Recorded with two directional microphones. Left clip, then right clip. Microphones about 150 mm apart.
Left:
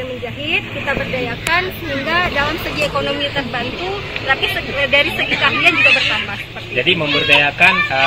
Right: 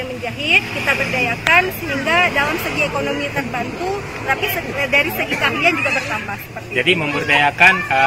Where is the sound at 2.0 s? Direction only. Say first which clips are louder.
Right 1 dB; 5° right (ahead or behind).